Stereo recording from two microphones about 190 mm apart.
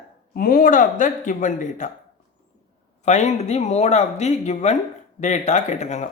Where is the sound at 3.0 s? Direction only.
35° left (ahead or behind).